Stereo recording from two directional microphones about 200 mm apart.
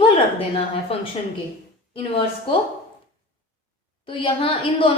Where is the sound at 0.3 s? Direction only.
30° left (ahead or behind).